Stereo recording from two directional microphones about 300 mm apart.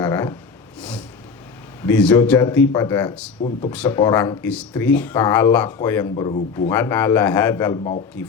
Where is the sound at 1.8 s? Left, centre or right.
Centre.